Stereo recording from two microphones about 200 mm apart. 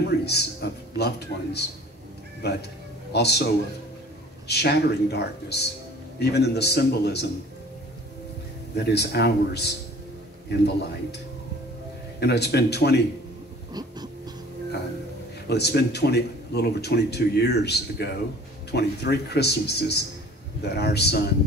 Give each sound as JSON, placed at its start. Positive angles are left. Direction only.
{"t": 0.1, "sound": "speech", "side_deg": 55}
{"t": 8.7, "sound": "speech", "side_deg": 55}
{"t": 12.2, "sound": "speech", "side_deg": 55}
{"t": 13.7, "sound": "a sound", "side_deg": -20}
{"t": 15.4, "sound": "a man's voice", "side_deg": 55}